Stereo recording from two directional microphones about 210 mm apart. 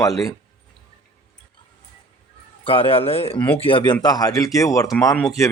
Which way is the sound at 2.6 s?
25° left (ahead or behind).